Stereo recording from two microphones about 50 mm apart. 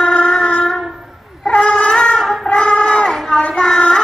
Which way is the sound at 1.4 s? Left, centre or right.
Centre.